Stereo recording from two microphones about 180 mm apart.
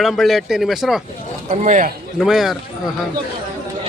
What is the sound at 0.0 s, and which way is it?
Speech, centre (ahead or behind).